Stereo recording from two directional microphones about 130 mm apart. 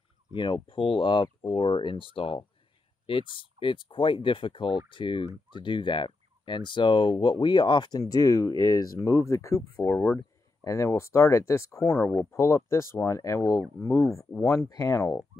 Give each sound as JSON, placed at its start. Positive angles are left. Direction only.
{"t": 0.3, "sound": "turkey", "side_deg": 35}
{"t": 2.1, "sound": "speech", "side_deg": 45}
{"t": 3.3, "sound": "turkey", "side_deg": 40}
{"t": 10.1, "sound": "speech", "side_deg": 20}